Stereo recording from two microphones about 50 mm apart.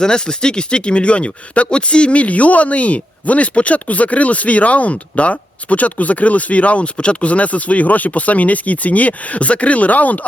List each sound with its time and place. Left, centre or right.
0.0 s speech: centre; by 10.2 s left